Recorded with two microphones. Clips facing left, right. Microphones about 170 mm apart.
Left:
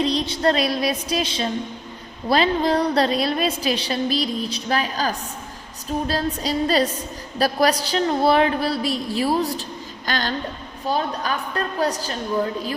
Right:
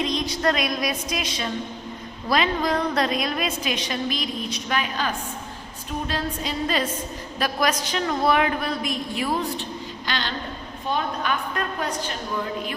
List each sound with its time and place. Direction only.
0.0 s a woman's voice: 35° left (ahead or behind)